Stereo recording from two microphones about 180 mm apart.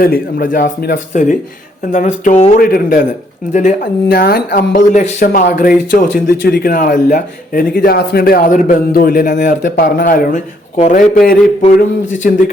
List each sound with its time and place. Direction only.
0.0 s speech: 55° left (ahead or behind)
3.5 s speech: 45° left (ahead or behind)
10.8 s speech: 40° left (ahead or behind)
12.1 s speech: 45° left (ahead or behind)